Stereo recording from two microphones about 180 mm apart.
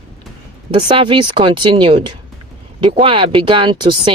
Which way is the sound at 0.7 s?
30° right (ahead or behind).